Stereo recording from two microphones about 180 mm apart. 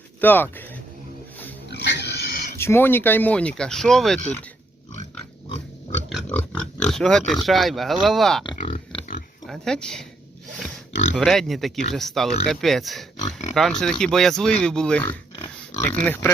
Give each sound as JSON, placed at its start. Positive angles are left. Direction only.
{"t": 0.2, "sound": "speech", "side_deg": 10}
{"t": 1.7, "sound": "pig", "side_deg": 70}
{"t": 2.6, "sound": "speech", "side_deg": 15}
{"t": 6.1, "sound": "pig", "side_deg": 0}
{"t": 6.3, "sound": "speech", "side_deg": 5}
{"t": 9.5, "sound": "speech", "side_deg": 5}
{"t": 11.2, "sound": "speech", "side_deg": 0}
{"t": 15.0, "sound": "pig", "side_deg": 20}
{"t": 16.0, "sound": "speech", "side_deg": 10}